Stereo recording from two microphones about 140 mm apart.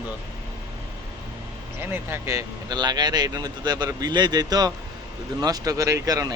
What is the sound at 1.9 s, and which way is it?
Speech, 15° right (ahead or behind).